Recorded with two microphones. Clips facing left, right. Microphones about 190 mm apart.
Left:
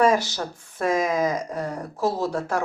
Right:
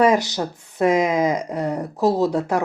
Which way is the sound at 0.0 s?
20° right (ahead or behind).